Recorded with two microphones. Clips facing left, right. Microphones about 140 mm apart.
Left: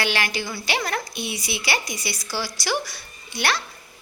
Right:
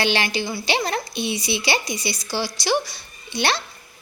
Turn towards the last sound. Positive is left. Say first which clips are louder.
# right 2 dB
turn(degrees=-25)  # may be behind; listen again after turning